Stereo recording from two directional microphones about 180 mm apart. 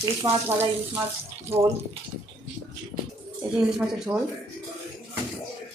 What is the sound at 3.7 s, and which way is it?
Speech, 5° right (ahead or behind).